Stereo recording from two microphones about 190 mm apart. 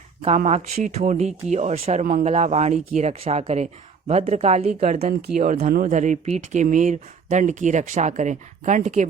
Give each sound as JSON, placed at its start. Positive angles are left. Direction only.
{"t": 0.2, "sound": "speech", "side_deg": -35}